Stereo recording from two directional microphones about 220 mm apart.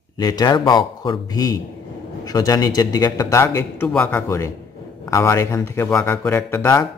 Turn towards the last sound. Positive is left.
turn(degrees=10)  # may be behind; listen again after turning